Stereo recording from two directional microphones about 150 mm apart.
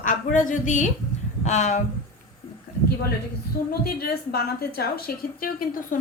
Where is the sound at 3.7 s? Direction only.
90° left.